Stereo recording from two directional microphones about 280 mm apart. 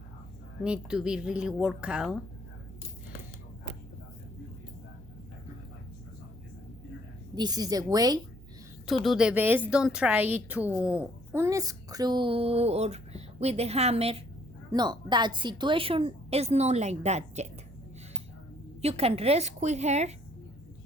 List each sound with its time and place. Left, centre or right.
0.6 s speech: centre
7.3 s a woman's voice: centre
9.0 s a woman's voice: centre; by 17.5 s right
18.8 s a woman's voice: right